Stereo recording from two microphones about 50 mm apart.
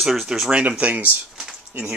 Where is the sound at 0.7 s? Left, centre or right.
Right.